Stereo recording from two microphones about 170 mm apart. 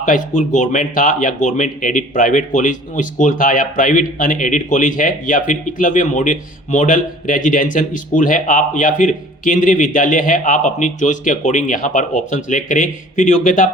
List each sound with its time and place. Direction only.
0.0 s speech: 50° left (ahead or behind)